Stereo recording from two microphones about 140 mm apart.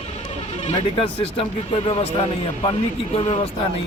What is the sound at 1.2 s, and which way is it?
Speech, 40° left (ahead or behind).